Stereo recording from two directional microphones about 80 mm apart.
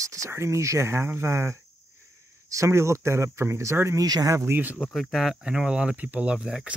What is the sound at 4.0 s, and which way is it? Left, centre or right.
Cricket, right.